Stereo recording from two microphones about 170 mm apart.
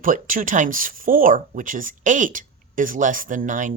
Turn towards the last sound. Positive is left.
turn(degrees=-50)  # may be behind; listen again after turning